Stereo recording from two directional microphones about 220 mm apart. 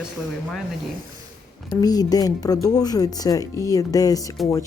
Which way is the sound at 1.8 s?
15° left (ahead or behind).